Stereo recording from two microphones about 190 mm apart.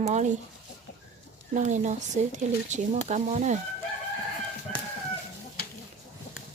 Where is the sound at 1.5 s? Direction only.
40° right (ahead or behind).